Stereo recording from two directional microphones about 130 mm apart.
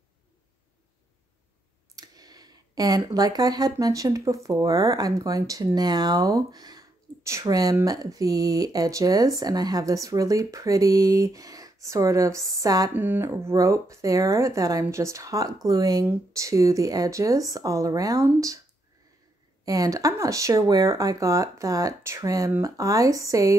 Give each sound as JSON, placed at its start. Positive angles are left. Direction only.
{"t": 2.0, "sound": "a sound", "side_deg": -30}
{"t": 3.7, "sound": "speech", "side_deg": -25}
{"t": 12.9, "sound": "speech", "side_deg": -15}
{"t": 19.6, "sound": "speech", "side_deg": -25}